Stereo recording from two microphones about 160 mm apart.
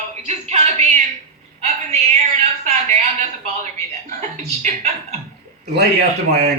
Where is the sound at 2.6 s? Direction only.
45° right (ahead or behind).